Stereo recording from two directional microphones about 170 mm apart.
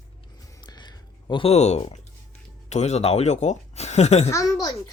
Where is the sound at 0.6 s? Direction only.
25° left (ahead or behind).